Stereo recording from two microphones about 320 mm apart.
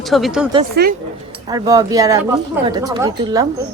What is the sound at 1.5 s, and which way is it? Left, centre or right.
Speech, centre.